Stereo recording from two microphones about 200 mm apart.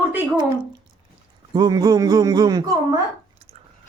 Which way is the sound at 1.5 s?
20° right (ahead or behind).